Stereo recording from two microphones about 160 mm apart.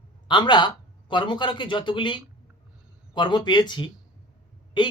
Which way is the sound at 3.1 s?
30° left (ahead or behind).